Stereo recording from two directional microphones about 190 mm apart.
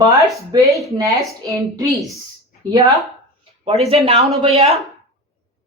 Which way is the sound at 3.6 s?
35° right (ahead or behind).